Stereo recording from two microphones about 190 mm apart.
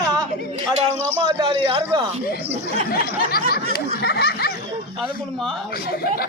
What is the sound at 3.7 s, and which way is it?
Snicker, 55° left (ahead or behind).